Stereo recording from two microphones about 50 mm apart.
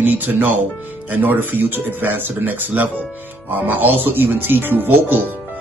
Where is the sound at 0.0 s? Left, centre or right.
Right.